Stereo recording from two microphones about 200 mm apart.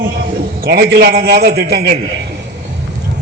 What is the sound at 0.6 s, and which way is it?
A man's voice, 50° right (ahead or behind).